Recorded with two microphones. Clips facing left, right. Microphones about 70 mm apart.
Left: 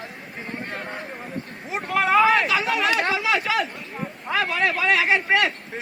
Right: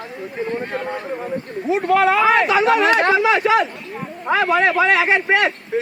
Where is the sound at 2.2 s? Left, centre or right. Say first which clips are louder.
Right 4 dB; right.